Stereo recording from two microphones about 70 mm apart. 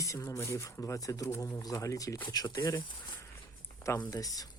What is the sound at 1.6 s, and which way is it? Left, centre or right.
Speech, left.